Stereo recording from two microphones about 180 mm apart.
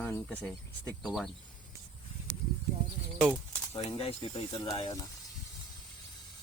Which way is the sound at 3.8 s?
30° left (ahead or behind).